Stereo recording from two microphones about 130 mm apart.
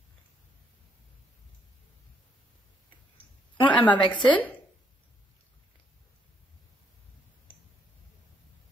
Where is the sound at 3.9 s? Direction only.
35° left (ahead or behind).